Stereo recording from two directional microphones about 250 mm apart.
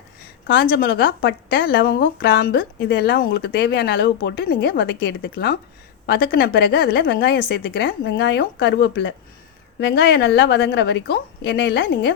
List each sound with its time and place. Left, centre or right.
0.4 s a woman's voice: left